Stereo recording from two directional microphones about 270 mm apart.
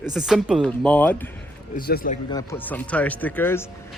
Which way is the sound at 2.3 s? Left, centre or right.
Centre.